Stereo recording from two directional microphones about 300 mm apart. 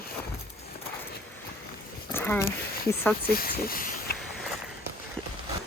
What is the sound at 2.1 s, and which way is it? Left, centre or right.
Speech, centre.